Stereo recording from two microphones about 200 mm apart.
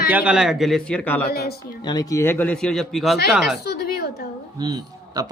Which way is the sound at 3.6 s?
50° left (ahead or behind).